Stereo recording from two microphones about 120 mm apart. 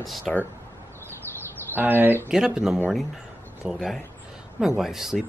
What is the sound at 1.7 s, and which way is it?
Speech, 15° right (ahead or behind).